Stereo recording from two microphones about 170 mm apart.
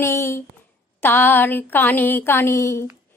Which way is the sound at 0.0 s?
15° left (ahead or behind).